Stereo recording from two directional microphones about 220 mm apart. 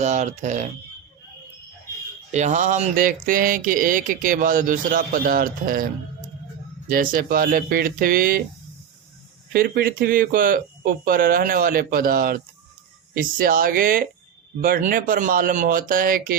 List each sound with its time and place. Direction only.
0.0 s speech: 30° right (ahead or behind)
2.3 s speech: 30° right (ahead or behind)
9.5 s speech: 40° right (ahead or behind)